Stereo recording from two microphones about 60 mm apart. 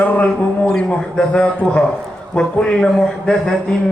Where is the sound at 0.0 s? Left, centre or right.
Left.